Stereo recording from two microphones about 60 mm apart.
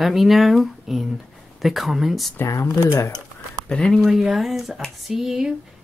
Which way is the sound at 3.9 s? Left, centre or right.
Centre.